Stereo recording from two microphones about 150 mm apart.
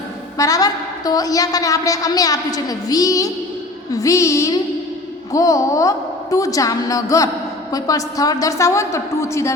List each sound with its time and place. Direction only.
0.3 s a woman's voice: 25° left (ahead or behind)